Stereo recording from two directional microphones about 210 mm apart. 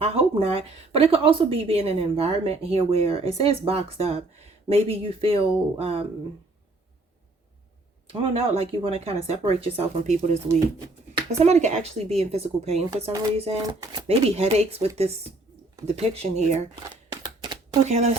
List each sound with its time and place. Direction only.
0.0 s speech: 30° right (ahead or behind)
8.0 s speech: 25° right (ahead or behind)
13.6 s speech: 15° right (ahead or behind)
14.1 s speech: 30° right (ahead or behind)
17.2 s a sound: 20° right (ahead or behind)
17.8 s speech: 30° right (ahead or behind)